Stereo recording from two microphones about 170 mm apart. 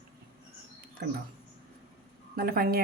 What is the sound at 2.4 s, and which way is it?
Speech, 65° right (ahead or behind).